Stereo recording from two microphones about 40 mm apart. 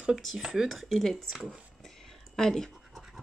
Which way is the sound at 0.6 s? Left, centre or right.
Centre.